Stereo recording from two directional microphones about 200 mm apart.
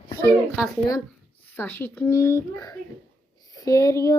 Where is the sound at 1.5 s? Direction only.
10° left (ahead or behind).